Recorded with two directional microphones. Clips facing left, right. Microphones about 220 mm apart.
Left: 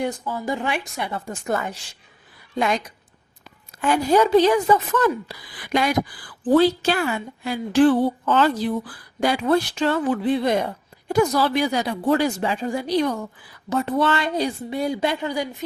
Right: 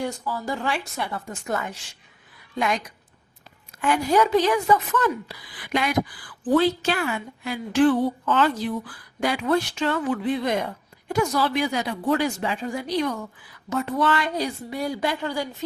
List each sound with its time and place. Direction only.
0.0 s a woman's voice: 20° left (ahead or behind)
1.3 s a woman's voice: 35° left (ahead or behind)
3.8 s a woman's voice: 30° left (ahead or behind); by 15.6 s 15° left (ahead or behind)